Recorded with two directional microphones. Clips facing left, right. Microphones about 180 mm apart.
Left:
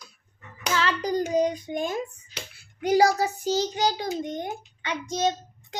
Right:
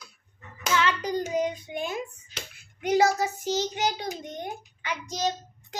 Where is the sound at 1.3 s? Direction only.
35° left (ahead or behind).